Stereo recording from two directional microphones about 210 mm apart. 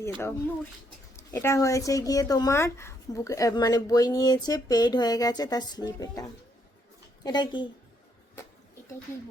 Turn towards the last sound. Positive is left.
turn(degrees=20)  # may be behind; listen again after turning